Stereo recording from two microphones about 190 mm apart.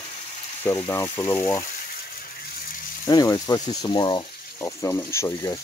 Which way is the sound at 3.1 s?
20° left (ahead or behind).